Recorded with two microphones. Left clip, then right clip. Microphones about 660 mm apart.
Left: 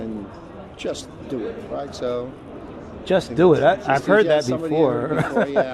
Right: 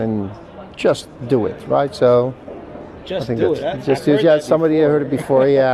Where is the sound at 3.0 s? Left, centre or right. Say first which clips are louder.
Left 2 dB; left.